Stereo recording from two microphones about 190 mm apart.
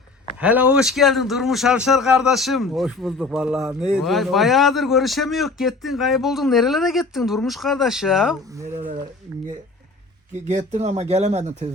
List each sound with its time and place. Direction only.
0.3 s a man's voice: 5° right (ahead or behind)
10.5 s speech: 40° right (ahead or behind)